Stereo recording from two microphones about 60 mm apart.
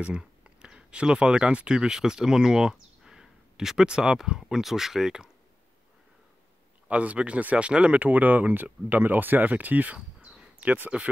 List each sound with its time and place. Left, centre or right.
0.0 s speech: centre
6.9 s speech: right
9.9 s a sound: centre